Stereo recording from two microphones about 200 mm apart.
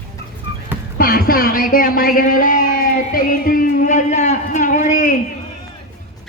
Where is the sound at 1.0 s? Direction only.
45° left (ahead or behind).